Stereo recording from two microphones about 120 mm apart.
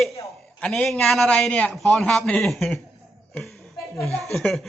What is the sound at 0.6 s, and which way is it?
Speech, 5° left (ahead or behind).